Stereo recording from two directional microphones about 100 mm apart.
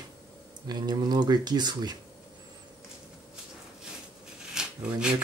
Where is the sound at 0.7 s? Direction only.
45° right (ahead or behind).